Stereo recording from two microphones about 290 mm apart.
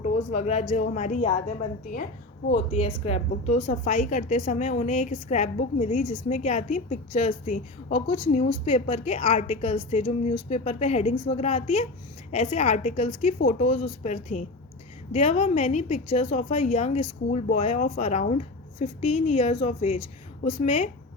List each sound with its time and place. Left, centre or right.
0.0 s a woman's voice: left
2.5 s a woman's voice: left